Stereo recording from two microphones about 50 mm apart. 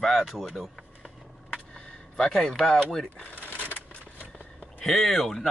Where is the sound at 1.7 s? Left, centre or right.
Centre.